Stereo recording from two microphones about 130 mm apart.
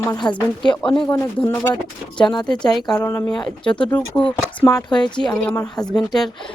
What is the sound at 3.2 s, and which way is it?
Speech, 5° left (ahead or behind).